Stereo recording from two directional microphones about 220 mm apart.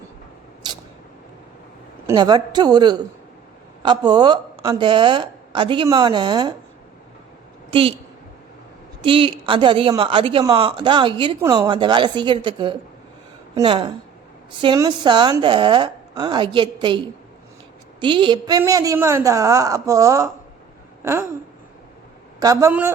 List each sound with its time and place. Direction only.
0.6 s a sound: 20° right (ahead or behind)
2.0 s a woman's voice: 20° right (ahead or behind)
7.7 s a woman's voice: 25° right (ahead or behind)
9.0 s a woman's voice: 25° right (ahead or behind)
18.0 s a woman's voice: 20° right (ahead or behind)
21.0 s a sound: 10° right (ahead or behind)
22.4 s a woman's voice: 15° right (ahead or behind)